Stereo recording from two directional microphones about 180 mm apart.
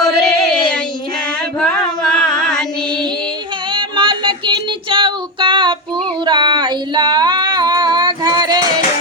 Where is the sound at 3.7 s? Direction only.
25° right (ahead or behind).